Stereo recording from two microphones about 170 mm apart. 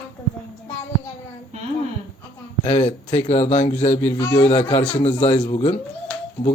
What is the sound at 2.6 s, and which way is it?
Speech, 40° left (ahead or behind).